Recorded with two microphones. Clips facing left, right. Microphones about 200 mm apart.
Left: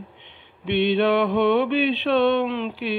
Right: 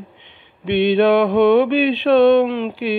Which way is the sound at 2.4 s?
45° right (ahead or behind).